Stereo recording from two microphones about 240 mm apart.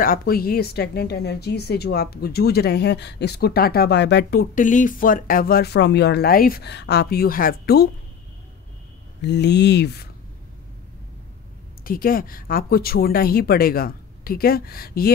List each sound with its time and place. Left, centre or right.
0.0 s a woman's voice: left
9.2 s speech: left
11.8 s a woman's voice: left